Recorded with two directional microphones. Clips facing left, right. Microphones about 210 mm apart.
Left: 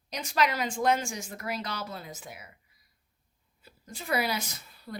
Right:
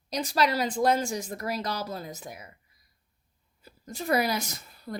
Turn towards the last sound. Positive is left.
turn(degrees=-45)  # may be behind; listen again after turning